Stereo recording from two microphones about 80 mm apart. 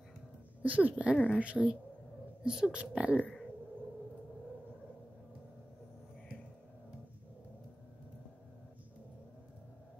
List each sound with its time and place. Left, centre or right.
0.6 s speech: centre
3.2 s speech: centre